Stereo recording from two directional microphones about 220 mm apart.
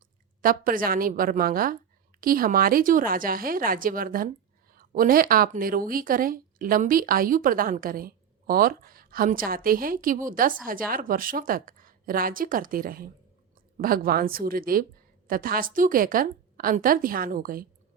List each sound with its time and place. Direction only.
0.4 s speech: 40° right (ahead or behind)